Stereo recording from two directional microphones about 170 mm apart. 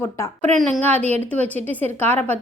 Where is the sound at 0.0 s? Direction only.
10° left (ahead or behind).